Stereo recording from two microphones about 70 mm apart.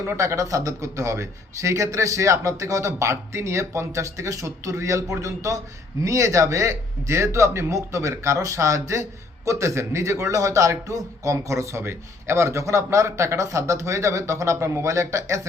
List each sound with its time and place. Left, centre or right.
0.2 s a man's voice: right